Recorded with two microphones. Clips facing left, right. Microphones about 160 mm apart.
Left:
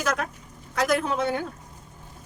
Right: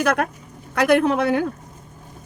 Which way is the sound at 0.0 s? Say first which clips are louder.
Right 7 dB; 60° right (ahead or behind).